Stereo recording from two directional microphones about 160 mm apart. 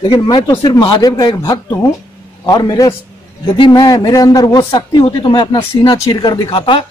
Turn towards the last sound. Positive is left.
turn(degrees=35)  # may be behind; listen again after turning